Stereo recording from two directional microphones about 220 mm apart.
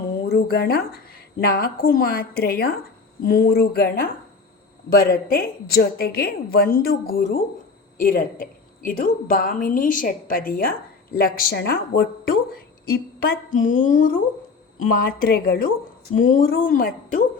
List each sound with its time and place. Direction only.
0.3 s a woman's voice: 45° left (ahead or behind)